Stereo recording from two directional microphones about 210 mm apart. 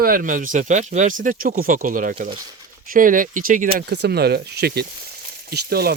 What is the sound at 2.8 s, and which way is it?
Speech, 40° right (ahead or behind).